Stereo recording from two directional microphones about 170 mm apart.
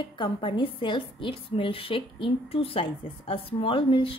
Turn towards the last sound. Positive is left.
turn(degrees=30)  # may be behind; listen again after turning